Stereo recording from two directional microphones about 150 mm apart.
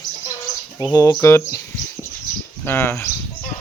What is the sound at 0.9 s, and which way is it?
Speech, 20° left (ahead or behind).